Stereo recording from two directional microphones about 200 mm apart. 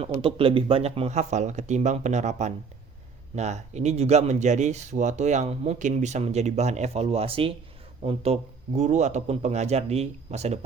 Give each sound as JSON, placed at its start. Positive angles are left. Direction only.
{"t": 0.0, "sound": "speech", "side_deg": -25}